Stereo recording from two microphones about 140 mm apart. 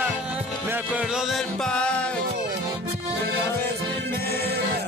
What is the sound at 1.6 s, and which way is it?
Music, 5° left (ahead or behind).